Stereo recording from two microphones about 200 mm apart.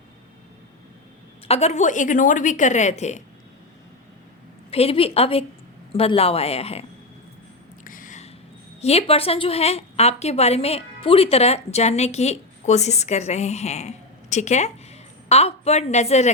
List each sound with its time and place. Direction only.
1.5 s a woman's voice: 35° left (ahead or behind)
4.7 s a woman's voice: 30° left (ahead or behind)
7.9 s a sound: 40° left (ahead or behind)
8.8 s a woman's voice: 30° left (ahead or behind)